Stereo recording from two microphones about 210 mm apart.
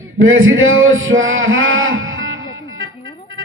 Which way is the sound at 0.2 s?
70° right (ahead or behind).